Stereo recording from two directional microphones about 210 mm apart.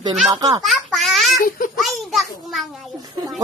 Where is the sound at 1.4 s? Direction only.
40° left (ahead or behind).